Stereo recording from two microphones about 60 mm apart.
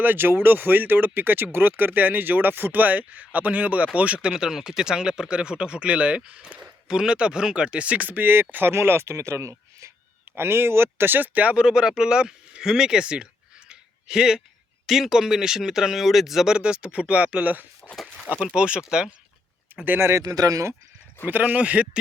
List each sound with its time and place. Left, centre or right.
0.0 s speech: right
10.3 s speech: right
11.5 s speech: centre
13.7 s a sound: centre
14.8 s speech: centre
16.6 s speech: centre
18.5 s speech: centre
19.7 s speech: right
20.0 s speech: right
20.2 s speech: right
21.2 s speech: right